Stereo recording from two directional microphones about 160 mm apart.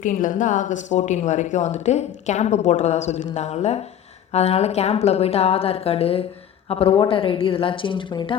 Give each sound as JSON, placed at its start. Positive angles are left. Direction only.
{"t": 0.0, "sound": "a woman's voice", "side_deg": 55}